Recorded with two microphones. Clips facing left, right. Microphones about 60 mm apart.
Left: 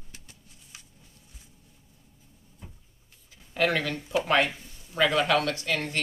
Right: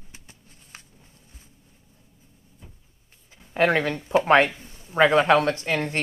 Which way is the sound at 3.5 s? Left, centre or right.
Right.